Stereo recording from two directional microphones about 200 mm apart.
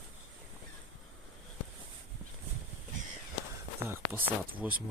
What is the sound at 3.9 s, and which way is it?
Speech, 10° right (ahead or behind).